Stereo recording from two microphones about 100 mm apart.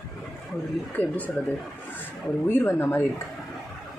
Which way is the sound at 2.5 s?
20° left (ahead or behind).